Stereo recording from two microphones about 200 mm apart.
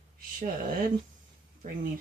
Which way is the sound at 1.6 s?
45° right (ahead or behind).